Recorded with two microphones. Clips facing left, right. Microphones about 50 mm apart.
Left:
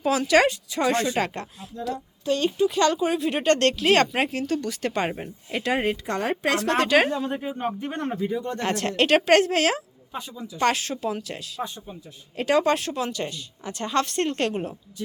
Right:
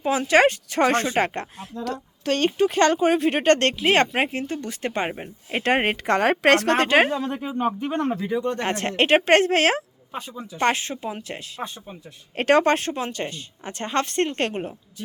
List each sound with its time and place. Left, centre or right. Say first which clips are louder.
0.0 s speech: right 2 dB; right
0.5 s a woman's voice: right 3 dB; right
1.0 s speech: right 2 dB; right
1.7 s a woman's voice: even; right; by 5.3 s centre
5.5 s speech: right 4 dB; right
5.7 s a woman's voice: right 5 dB; right
6.7 s speech: right 2 dB; right
7.8 s speech: right 3 dB; right
8.4 s a woman's voice: right 4 dB; right
8.6 s speech: right 1 dB; right
11.2 s speech: even; right
12.4 s speech: right 3 dB; right